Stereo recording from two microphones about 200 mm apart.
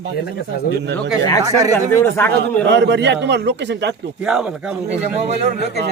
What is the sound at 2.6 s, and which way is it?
A man's voice, 60° right (ahead or behind).